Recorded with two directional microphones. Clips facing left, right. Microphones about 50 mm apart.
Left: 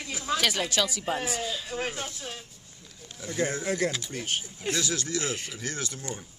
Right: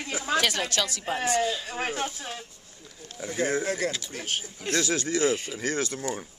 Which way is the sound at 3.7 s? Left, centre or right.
Centre.